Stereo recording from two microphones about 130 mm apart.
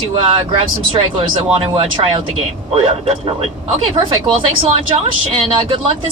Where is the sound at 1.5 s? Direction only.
50° right (ahead or behind).